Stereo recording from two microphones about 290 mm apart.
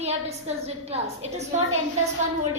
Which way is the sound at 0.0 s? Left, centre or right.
Right.